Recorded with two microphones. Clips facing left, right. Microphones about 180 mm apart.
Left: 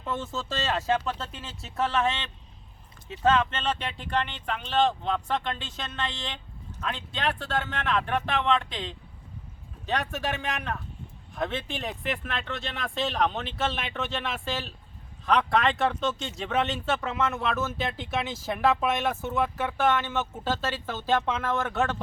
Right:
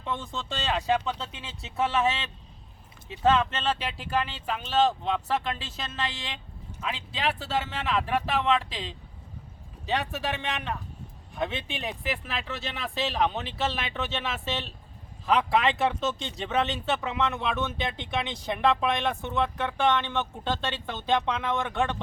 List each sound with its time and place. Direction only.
0.0 s speech: 5° left (ahead or behind)